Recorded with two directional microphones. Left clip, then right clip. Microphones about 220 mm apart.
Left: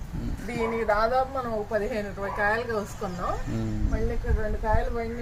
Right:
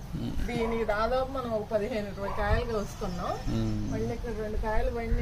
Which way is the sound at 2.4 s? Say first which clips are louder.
Left 5 dB; 20° left (ahead or behind).